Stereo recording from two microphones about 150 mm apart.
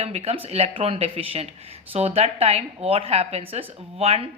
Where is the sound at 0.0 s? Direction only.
45° right (ahead or behind).